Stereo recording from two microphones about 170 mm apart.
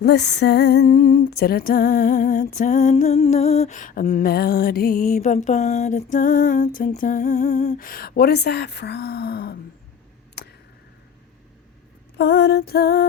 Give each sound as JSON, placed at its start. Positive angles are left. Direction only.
{"t": 0.0, "sound": "female singing", "side_deg": 85}
{"t": 6.7, "sound": "humming", "side_deg": 55}
{"t": 10.4, "sound": "a sound", "side_deg": 80}
{"t": 12.1, "sound": "lullaby", "side_deg": 70}